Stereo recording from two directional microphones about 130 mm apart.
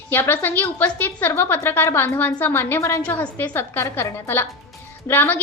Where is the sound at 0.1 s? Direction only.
15° left (ahead or behind).